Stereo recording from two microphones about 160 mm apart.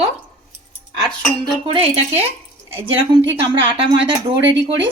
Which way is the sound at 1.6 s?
35° right (ahead or behind).